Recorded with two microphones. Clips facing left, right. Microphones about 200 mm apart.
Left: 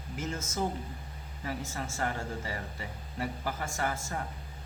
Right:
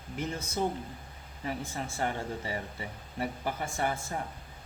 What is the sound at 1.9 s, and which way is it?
Speech, 20° right (ahead or behind).